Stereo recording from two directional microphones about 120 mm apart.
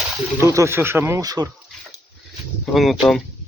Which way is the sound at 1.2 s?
30° right (ahead or behind).